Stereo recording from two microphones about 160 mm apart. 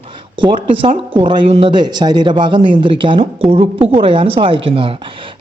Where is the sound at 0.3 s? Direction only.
30° right (ahead or behind).